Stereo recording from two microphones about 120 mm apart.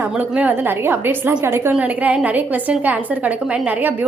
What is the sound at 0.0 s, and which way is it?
A woman's voice, 15° right (ahead or behind).